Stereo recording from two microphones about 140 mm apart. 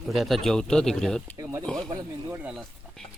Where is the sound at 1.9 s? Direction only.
25° right (ahead or behind).